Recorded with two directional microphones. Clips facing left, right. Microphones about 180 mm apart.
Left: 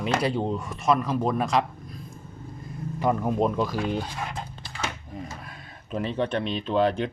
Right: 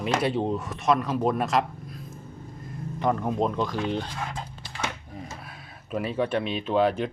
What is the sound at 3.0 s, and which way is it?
Speech, 5° left (ahead or behind).